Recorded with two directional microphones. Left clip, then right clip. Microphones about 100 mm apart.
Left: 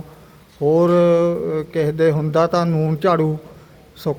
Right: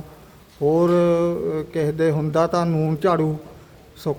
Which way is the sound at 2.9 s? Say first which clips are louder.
Left 3 dB; 5° right (ahead or behind).